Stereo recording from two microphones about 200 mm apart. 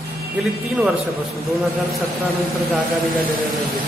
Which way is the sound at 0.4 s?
Centre (ahead or behind).